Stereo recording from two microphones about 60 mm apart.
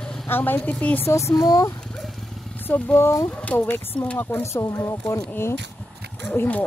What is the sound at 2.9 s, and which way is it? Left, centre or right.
Speech, left.